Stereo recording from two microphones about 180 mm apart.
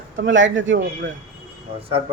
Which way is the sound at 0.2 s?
90° right.